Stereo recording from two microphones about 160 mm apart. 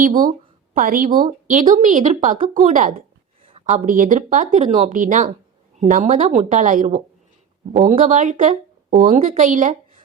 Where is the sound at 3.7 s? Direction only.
55° right (ahead or behind).